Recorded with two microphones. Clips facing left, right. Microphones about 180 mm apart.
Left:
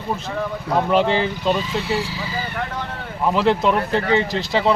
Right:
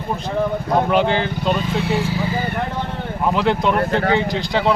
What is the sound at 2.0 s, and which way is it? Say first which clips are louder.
Speech: right 7 dB; 55° right (ahead or behind).